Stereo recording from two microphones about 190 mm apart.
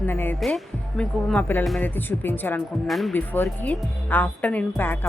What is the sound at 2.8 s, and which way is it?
Speech, centre (ahead or behind).